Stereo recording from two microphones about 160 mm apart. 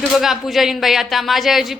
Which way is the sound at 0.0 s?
Centre (ahead or behind).